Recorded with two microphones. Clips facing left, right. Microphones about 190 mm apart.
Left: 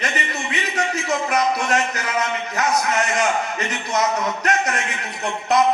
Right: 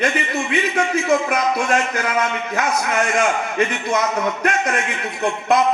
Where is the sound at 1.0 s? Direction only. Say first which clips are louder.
Even; 55° right (ahead or behind).